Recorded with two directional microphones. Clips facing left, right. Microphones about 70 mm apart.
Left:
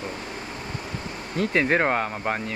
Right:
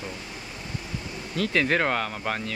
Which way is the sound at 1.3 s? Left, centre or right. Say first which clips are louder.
Left 2 dB; left.